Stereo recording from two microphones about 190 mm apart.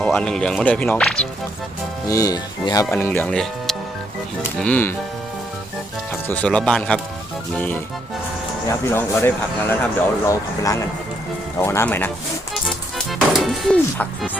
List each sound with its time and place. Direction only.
0.0 s speech: 5° left (ahead or behind)
2.0 s speech: 20° left (ahead or behind)
6.2 s speech: 5° left (ahead or behind)
8.8 s speech: 10° left (ahead or behind)
12.6 s music: centre (ahead or behind)